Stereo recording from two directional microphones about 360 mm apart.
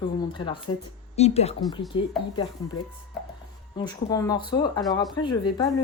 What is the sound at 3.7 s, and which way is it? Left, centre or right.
Speech, centre.